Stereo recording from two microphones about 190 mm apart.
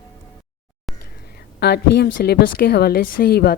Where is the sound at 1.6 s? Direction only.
60° left (ahead or behind).